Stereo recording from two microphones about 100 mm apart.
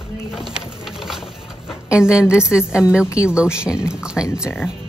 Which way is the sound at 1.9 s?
10° right (ahead or behind).